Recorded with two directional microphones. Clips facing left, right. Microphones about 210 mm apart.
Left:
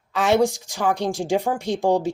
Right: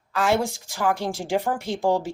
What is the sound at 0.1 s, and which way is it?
A woman's voice, 20° left (ahead or behind).